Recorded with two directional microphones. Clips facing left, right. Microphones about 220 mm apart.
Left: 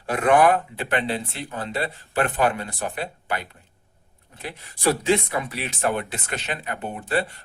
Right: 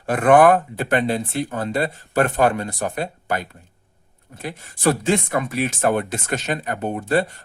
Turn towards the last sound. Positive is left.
turn(degrees=-40)  # may be behind; listen again after turning